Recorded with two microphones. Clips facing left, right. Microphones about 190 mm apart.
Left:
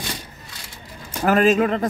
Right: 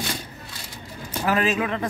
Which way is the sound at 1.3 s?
45° left (ahead or behind).